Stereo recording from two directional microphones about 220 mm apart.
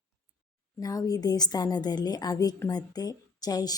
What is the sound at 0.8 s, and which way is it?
A woman's voice, 15° left (ahead or behind).